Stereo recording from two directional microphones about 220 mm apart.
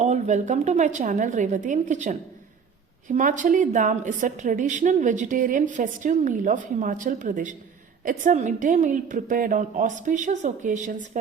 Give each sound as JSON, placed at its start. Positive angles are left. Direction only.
{"t": 0.0, "sound": "a woman's voice", "side_deg": -30}